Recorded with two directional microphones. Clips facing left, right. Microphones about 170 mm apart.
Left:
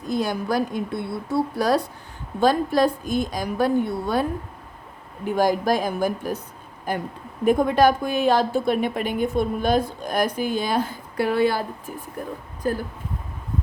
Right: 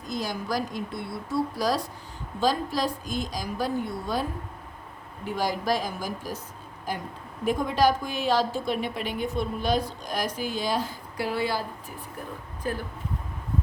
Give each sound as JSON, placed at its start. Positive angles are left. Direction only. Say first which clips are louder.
{"t": 0.1, "sound": "a woman's voice", "louder": "left 6 dB", "side_deg": 60}
{"t": 5.2, "sound": "a woman's voice", "louder": "left 7 dB", "side_deg": 50}
{"t": 12.6, "sound": "speech", "louder": "left 6 dB", "side_deg": 40}